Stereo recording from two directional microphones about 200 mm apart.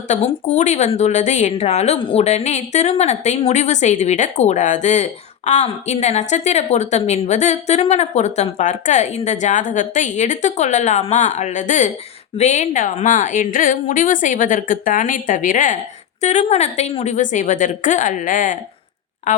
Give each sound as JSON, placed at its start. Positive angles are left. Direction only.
{"t": 0.1, "sound": "a woman's voice", "side_deg": 35}